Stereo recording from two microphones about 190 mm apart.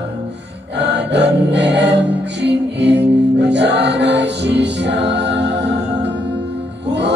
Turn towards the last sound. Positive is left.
turn(degrees=-65)  # may be behind; listen again after turning